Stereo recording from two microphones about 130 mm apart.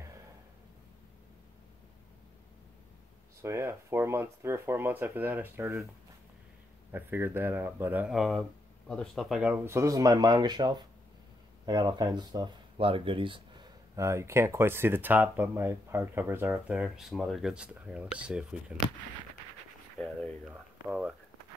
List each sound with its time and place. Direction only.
3.4 s speech: 20° right (ahead or behind)
6.9 s speech: 15° right (ahead or behind)
8.1 s speech: centre (ahead or behind)
9.7 s speech: 25° right (ahead or behind); by 13.7 s 40° right (ahead or behind)
13.9 s speech: 20° right (ahead or behind)
20.0 s speech: 5° left (ahead or behind)
20.4 s speech: 10° right (ahead or behind)